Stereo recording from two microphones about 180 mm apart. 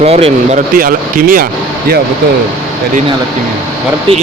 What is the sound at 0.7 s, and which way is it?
Speech, 50° right (ahead or behind).